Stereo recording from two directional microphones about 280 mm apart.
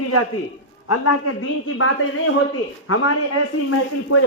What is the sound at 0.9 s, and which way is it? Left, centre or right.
Speech, left.